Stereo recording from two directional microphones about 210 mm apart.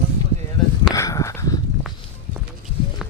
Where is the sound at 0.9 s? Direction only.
15° left (ahead or behind).